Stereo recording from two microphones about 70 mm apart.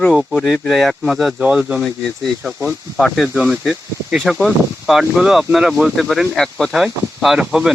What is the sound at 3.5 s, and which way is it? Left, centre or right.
Speech, centre.